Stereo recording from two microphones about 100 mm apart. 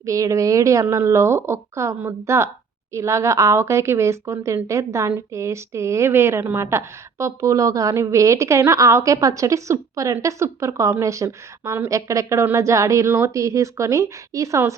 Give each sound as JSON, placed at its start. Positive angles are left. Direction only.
{"t": 0.0, "sound": "a woman's voice", "side_deg": -35}